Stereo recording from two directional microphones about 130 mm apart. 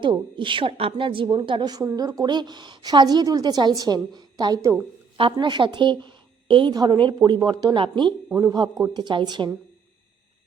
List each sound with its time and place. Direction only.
0.0 s a woman's voice: 40° right (ahead or behind)
5.1 s a woman's voice: 40° right (ahead or behind)
8.3 s a woman's voice: 25° right (ahead or behind)